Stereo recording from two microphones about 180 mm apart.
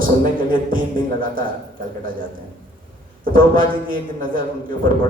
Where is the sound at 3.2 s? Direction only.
50° right (ahead or behind).